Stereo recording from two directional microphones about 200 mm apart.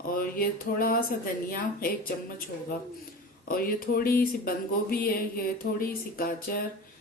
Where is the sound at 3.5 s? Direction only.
45° left (ahead or behind).